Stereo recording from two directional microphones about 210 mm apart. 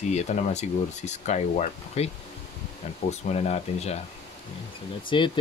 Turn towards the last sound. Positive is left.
turn(degrees=20)  # may be behind; listen again after turning